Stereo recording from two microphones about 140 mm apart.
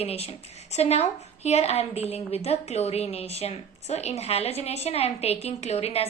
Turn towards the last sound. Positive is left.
turn(degrees=45)  # may be behind; listen again after turning